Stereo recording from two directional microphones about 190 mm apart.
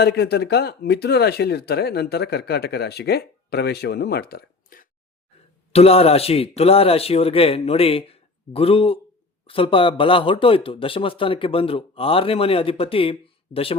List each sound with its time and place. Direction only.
0.0 s speech: 60° left (ahead or behind)
5.7 s a man's voice: 30° left (ahead or behind)